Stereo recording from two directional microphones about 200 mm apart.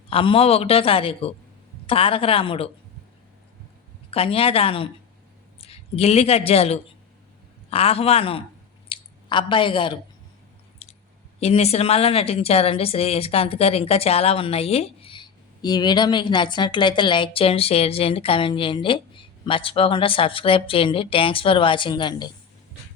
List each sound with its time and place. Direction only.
0.1 s a woman's voice: 25° left (ahead or behind)
4.1 s a woman's voice: 30° left (ahead or behind)
10.8 s squish: 30° left (ahead or behind)
11.3 s a woman's voice: 30° left (ahead or behind)